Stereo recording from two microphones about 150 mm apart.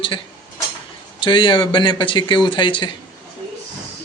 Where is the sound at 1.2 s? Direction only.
35° left (ahead or behind).